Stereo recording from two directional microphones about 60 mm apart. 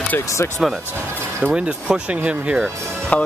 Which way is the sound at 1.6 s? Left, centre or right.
Centre.